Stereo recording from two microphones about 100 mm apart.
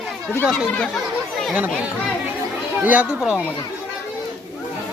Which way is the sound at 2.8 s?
15° right (ahead or behind).